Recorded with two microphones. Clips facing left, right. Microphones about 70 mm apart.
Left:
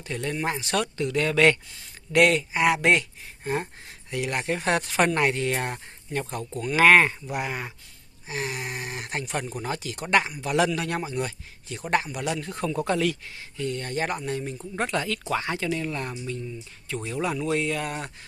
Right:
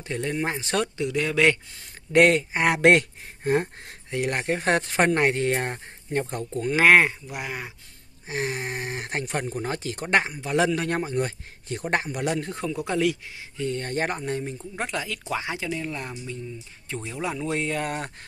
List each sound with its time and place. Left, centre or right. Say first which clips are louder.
0.0 s speech: right 1 dB; right
0.9 s speech: left 1 dB; centre
2.1 s speech: right 2 dB; right
2.8 s speech: right 4 dB; right
4.2 s speech: right 2 dB; right; by 7.2 s centre
7.3 s speech: left 3 dB; centre
8.3 s speech: right 2 dB; right
12.8 s speech: right 3 dB; centre
13.8 s speech: right 1 dB; right
14.8 s speech: left 3 dB; centre
15.2 s speech: left 2 dB; centre
17.8 s speech: right 2 dB; right